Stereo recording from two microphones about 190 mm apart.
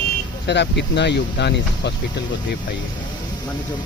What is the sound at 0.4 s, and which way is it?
Speech, 65° left (ahead or behind).